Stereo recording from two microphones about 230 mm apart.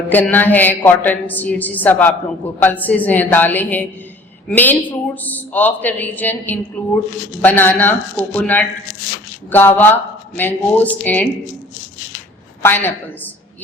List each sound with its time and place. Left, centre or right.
0.1 s a man's voice: centre
12.6 s a man's voice: centre